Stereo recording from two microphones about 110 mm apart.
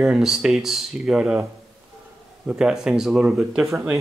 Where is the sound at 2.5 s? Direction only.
5° right (ahead or behind).